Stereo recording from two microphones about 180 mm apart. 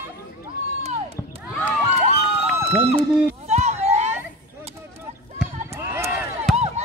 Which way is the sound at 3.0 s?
35° right (ahead or behind).